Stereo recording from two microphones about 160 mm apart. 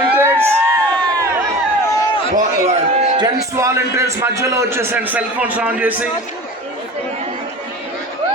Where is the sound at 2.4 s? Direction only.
45° right (ahead or behind).